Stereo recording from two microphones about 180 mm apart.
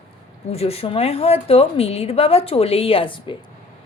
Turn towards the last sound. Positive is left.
turn(degrees=30)  # may be behind; listen again after turning